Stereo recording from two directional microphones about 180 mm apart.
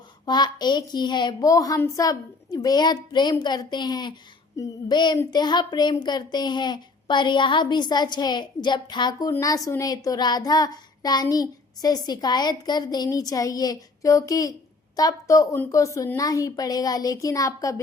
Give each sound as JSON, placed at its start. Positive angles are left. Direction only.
{"t": 0.3, "sound": "speech", "side_deg": 25}